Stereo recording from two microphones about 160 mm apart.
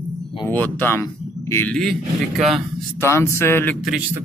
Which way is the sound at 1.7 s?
Centre (ahead or behind).